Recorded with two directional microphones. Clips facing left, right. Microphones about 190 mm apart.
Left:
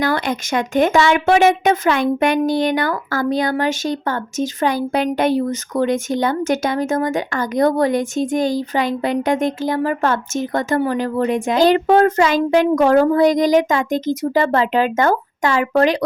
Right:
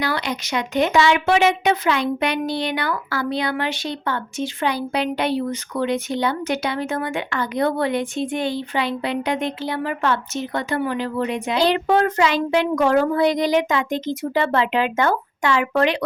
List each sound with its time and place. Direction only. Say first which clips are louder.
0.0 s speech: left 5 dB; 50° left (ahead or behind)